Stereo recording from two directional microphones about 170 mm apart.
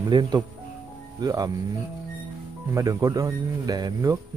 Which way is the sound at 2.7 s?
20° right (ahead or behind).